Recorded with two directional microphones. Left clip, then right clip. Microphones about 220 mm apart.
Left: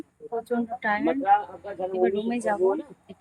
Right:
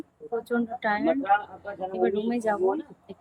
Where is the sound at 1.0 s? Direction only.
40° left (ahead or behind).